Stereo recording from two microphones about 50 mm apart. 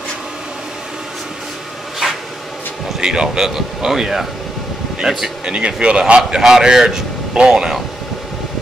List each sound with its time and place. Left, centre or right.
3.0 s speech: centre
5.4 s speech: centre